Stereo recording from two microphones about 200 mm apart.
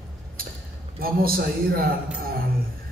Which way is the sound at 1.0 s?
50° right (ahead or behind).